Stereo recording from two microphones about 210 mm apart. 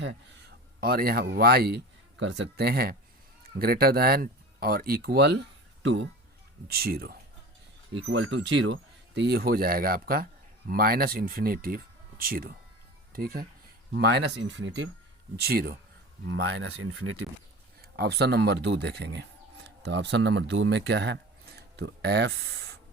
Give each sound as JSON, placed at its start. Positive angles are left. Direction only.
{"t": 0.8, "sound": "a man's voice", "side_deg": -45}
{"t": 6.7, "sound": "a man's voice", "side_deg": -45}
{"t": 7.9, "sound": "a man's voice", "side_deg": -60}
{"t": 15.4, "sound": "a man's voice", "side_deg": -45}
{"t": 16.2, "sound": "speech", "side_deg": -65}
{"t": 17.9, "sound": "speech", "side_deg": -50}